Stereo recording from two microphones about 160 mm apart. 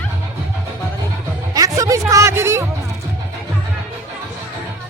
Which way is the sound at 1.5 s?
20° right (ahead or behind).